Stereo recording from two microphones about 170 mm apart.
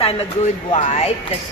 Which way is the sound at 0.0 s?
35° left (ahead or behind).